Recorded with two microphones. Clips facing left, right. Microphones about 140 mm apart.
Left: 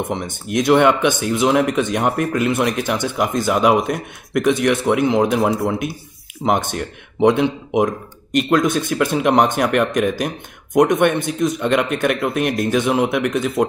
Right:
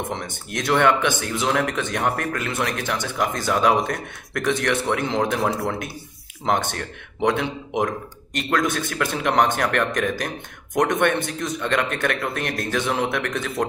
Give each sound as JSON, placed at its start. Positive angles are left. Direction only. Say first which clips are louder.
{"t": 0.1, "sound": "speech", "louder": "left 7 dB", "side_deg": 15}